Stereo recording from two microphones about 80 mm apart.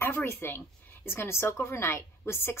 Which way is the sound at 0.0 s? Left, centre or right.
Left.